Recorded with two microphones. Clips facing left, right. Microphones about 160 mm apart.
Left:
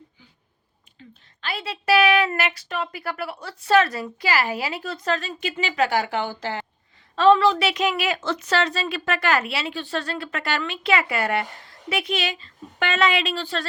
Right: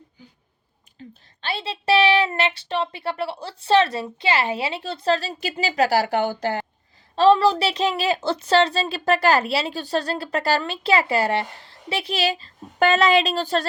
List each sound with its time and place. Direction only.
0.9 s whispering: 40° right (ahead or behind)
1.4 s a woman's voice: 30° right (ahead or behind)